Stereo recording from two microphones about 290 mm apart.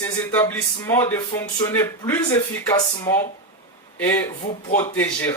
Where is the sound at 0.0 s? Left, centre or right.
Centre.